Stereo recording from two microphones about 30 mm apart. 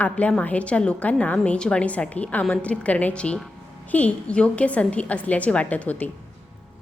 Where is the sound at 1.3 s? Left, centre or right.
Left.